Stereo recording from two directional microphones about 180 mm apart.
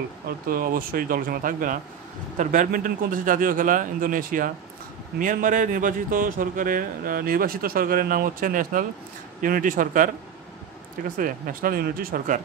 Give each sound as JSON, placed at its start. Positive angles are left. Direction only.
{"t": 0.5, "sound": "a man's voice", "side_deg": -55}
{"t": 11.1, "sound": "a man's voice", "side_deg": -50}